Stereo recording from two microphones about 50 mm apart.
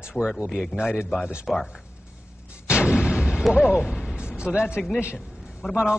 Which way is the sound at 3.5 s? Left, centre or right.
Left.